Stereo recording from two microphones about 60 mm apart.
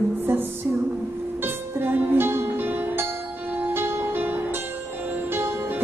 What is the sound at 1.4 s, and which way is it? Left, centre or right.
Music, right.